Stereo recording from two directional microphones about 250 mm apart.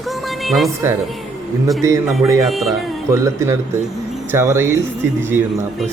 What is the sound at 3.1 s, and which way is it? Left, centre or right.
Speech, centre.